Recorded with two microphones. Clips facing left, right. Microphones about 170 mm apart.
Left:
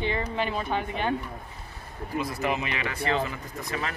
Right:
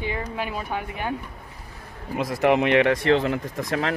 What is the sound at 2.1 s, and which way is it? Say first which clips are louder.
Speech: right 8 dB; 80° right.